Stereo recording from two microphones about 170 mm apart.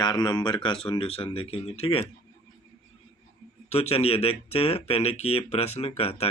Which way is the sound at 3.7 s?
35° left (ahead or behind).